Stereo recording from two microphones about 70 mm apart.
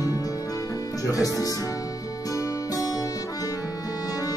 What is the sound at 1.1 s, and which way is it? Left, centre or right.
Music, left.